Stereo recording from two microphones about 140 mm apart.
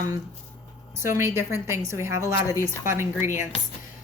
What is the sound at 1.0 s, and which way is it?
Speech, 20° right (ahead or behind).